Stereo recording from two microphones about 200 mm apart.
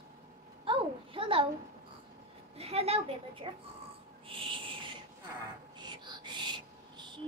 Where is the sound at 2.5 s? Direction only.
30° right (ahead or behind).